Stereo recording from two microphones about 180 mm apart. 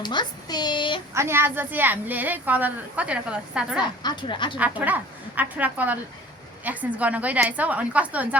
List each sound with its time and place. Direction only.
0.0 s a woman's voice: 25° left (ahead or behind)
1.1 s a woman's voice: 15° right (ahead or behind)
4.0 s a woman's voice: 25° left (ahead or behind)
4.5 s a woman's voice: 10° right (ahead or behind)